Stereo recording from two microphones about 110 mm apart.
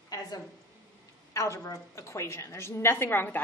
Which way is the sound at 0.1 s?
35° left (ahead or behind).